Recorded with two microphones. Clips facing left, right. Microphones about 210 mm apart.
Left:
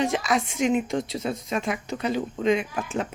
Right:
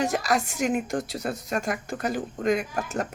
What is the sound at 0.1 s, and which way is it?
Speech, 45° right (ahead or behind).